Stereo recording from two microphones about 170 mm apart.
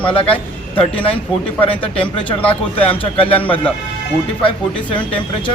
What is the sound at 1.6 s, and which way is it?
Speech, 30° left (ahead or behind).